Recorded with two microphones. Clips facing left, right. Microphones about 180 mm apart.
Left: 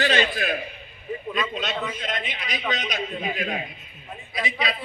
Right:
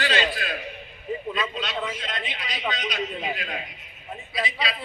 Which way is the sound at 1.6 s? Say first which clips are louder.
Left 1 dB; 45° left (ahead or behind).